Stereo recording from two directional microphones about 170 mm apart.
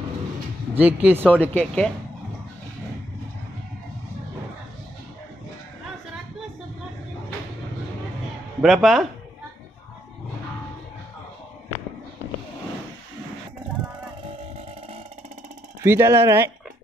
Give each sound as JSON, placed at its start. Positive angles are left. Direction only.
{"t": 0.7, "sound": "speech", "side_deg": -10}
{"t": 1.2, "sound": "speech", "side_deg": 10}
{"t": 8.6, "sound": "speech", "side_deg": 0}
{"t": 15.8, "sound": "speech", "side_deg": -15}